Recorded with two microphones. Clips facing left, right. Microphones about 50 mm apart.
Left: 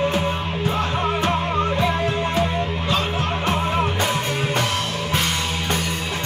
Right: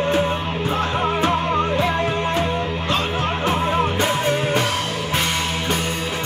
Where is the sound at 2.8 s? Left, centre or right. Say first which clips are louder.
Right 2 dB; right.